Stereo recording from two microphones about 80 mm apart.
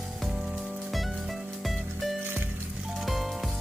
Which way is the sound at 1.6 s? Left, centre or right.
Centre.